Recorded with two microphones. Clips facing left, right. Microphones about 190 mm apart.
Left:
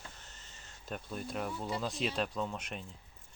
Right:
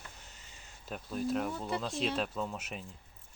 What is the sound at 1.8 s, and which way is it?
Speech, centre (ahead or behind).